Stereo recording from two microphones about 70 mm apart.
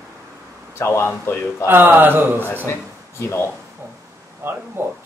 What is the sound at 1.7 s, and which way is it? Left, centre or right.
Speech, right.